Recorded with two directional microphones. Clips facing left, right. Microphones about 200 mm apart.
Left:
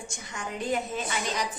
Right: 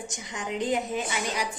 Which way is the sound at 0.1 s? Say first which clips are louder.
Right 4 dB; 15° right (ahead or behind).